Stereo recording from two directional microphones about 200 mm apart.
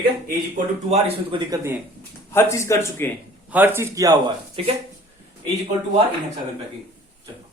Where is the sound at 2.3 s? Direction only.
15° left (ahead or behind).